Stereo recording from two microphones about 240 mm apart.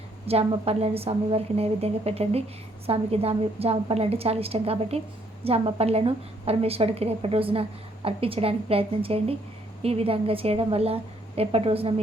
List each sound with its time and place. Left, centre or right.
0.3 s a woman's voice: right